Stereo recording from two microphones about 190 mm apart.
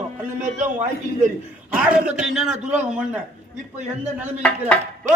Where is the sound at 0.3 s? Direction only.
40° right (ahead or behind).